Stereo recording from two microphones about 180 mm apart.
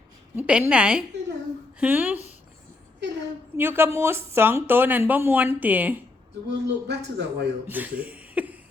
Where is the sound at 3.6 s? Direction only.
15° right (ahead or behind).